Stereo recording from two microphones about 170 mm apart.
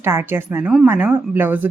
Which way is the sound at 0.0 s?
15° right (ahead or behind).